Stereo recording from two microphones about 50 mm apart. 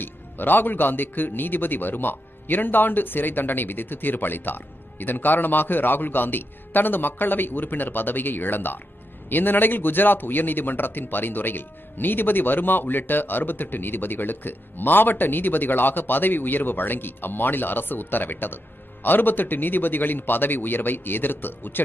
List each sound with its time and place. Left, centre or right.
0.0 s a man's voice: left